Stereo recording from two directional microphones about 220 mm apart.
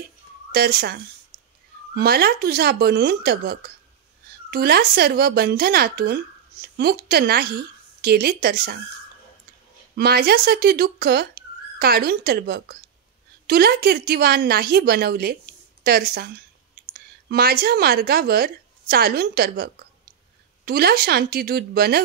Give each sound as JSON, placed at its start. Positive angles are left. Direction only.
{"t": 0.5, "sound": "a woman's voice", "side_deg": -45}
{"t": 9.9, "sound": "a woman's voice", "side_deg": -45}